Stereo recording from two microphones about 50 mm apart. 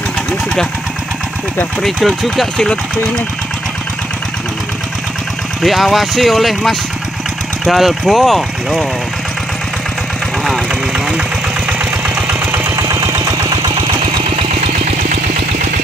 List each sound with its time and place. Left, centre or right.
1.8 s speech: centre
2.5 s speech: centre
5.6 s speech: centre
10.4 s speech: centre
10.9 s speech: centre
12.4 s engine: right
12.7 s engine: right